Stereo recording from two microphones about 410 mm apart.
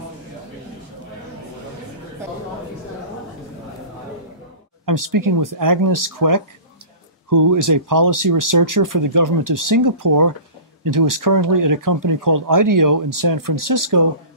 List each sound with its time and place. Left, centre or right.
4.8 s speech: right